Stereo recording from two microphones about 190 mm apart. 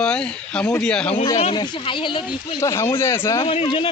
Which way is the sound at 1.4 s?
25° left (ahead or behind).